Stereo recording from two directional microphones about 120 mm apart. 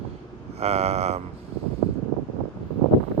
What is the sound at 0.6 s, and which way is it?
Speech, 60° right (ahead or behind).